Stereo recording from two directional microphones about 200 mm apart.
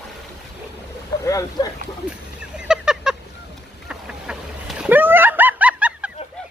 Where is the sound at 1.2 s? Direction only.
15° left (ahead or behind).